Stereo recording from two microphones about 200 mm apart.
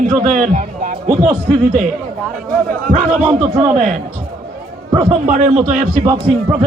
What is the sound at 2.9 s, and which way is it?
Speech, 40° right (ahead or behind).